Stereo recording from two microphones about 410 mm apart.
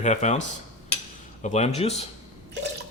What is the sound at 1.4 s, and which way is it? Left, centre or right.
Speech, centre.